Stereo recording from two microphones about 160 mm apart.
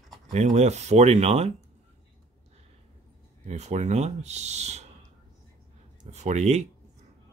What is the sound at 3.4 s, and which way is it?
Speech, 45° right (ahead or behind).